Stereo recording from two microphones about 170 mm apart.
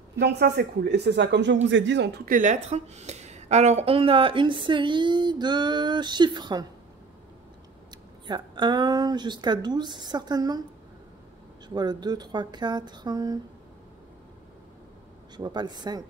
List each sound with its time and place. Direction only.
0.2 s speech: 75° right (ahead or behind); by 6.6 s 25° right (ahead or behind)
8.3 s speech: 25° right (ahead or behind)
11.7 s speech: 25° right (ahead or behind)
15.3 s speech: 25° right (ahead or behind)